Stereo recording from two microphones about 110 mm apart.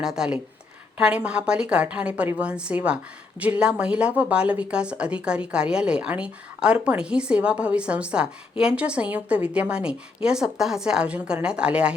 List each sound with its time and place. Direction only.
0.0 s a woman's voice: 5° right (ahead or behind)